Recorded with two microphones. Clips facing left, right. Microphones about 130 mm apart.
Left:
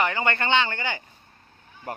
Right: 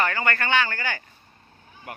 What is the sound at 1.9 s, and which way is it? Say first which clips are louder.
Speech: left 5 dB; 35° left (ahead or behind).